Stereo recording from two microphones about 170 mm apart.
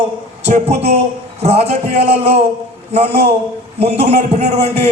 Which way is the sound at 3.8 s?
40° right (ahead or behind).